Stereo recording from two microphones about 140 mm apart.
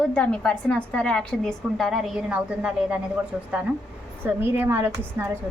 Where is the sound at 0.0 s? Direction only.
10° left (ahead or behind).